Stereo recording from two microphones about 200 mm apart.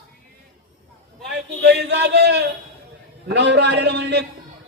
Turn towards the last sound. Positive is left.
turn(degrees=-60)  # may be behind; listen again after turning